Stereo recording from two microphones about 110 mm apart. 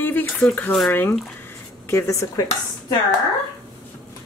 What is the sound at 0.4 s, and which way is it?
Speech, 15° left (ahead or behind).